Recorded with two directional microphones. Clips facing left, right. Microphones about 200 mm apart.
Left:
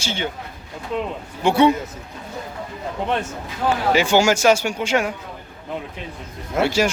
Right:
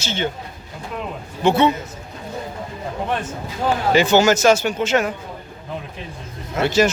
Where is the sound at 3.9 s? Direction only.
10° left (ahead or behind).